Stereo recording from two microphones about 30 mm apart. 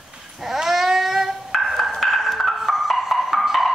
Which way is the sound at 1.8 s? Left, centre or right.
Centre.